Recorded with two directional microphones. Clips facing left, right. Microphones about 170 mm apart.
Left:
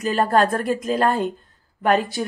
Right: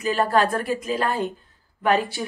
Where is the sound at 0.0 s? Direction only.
45° left (ahead or behind).